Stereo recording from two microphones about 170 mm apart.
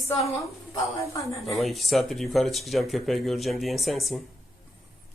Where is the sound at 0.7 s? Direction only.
20° left (ahead or behind).